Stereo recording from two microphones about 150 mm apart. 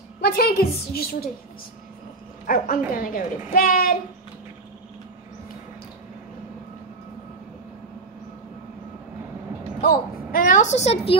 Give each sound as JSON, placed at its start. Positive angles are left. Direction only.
{"t": 0.2, "sound": "a woman's voice", "side_deg": 90}
{"t": 2.4, "sound": "a woman's voice", "side_deg": 70}
{"t": 9.8, "sound": "a woman's voice", "side_deg": 70}